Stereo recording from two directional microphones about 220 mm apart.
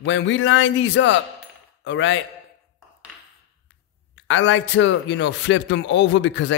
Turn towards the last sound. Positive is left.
turn(degrees=55)  # may be behind; listen again after turning